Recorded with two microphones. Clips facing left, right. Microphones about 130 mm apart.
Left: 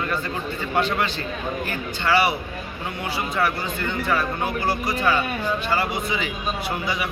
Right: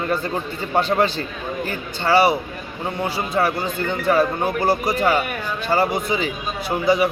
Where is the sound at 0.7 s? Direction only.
35° right (ahead or behind).